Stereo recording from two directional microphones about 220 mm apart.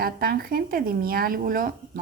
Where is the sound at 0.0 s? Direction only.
45° right (ahead or behind).